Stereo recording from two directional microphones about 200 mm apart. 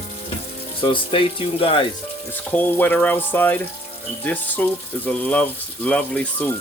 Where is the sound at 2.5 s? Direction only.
10° left (ahead or behind).